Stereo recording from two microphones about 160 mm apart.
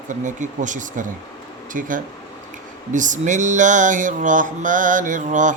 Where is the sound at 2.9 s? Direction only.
50° right (ahead or behind).